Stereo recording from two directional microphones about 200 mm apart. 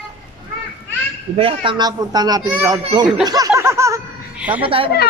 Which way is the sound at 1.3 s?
25° right (ahead or behind).